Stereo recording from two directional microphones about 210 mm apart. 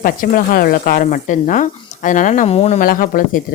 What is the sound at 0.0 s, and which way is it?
Speech, 40° left (ahead or behind).